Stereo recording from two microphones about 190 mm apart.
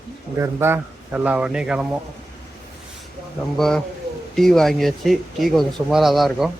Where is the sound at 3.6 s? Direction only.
5° left (ahead or behind).